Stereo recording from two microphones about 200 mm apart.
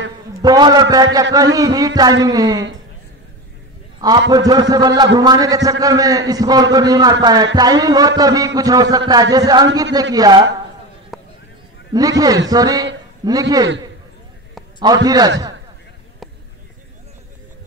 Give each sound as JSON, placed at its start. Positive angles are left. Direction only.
{"t": 0.4, "sound": "a man's voice", "side_deg": -20}
{"t": 4.3, "sound": "a man's voice", "side_deg": -20}
{"t": 11.1, "sound": "a sound", "side_deg": 0}
{"t": 11.9, "sound": "a man's voice", "side_deg": -20}
{"t": 15.0, "sound": "a man's voice", "side_deg": -20}